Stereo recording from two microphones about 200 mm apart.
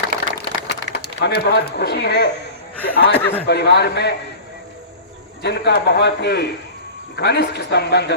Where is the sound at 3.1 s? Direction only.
10° left (ahead or behind).